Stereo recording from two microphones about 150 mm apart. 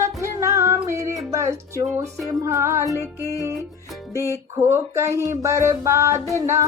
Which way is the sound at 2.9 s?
20° left (ahead or behind).